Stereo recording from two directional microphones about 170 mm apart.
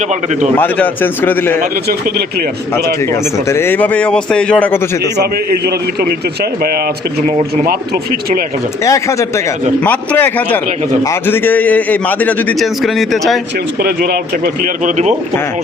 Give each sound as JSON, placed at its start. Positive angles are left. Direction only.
{"t": 0.5, "sound": "a man's voice", "side_deg": 10}
{"t": 2.7, "sound": "a man's voice", "side_deg": 15}
{"t": 5.1, "sound": "a man's voice", "side_deg": -75}
{"t": 8.8, "sound": "a man's voice", "side_deg": 20}
{"t": 13.8, "sound": "speech", "side_deg": -65}